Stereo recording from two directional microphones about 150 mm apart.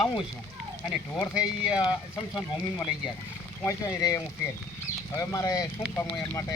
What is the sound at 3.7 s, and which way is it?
Speech, 20° left (ahead or behind).